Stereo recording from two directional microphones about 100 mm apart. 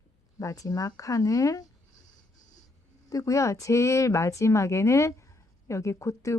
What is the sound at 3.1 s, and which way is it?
Speech, 35° left (ahead or behind).